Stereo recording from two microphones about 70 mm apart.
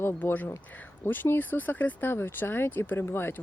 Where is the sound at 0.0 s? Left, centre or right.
Left.